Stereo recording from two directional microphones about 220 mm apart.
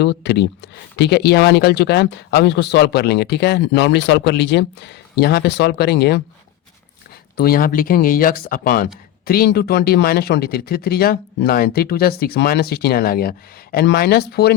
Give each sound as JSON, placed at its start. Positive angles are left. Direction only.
{"t": 0.0, "sound": "speech", "side_deg": 50}
{"t": 7.3, "sound": "speech", "side_deg": 45}